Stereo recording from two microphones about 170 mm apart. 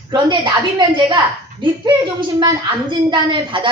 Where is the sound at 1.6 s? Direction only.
30° right (ahead or behind).